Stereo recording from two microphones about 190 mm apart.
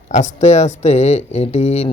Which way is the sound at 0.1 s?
40° left (ahead or behind).